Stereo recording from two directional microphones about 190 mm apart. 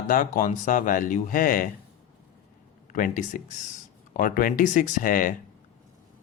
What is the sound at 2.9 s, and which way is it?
Speech, 45° left (ahead or behind).